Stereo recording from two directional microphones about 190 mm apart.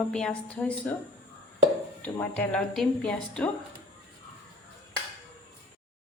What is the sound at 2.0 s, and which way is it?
A woman's voice, 10° left (ahead or behind).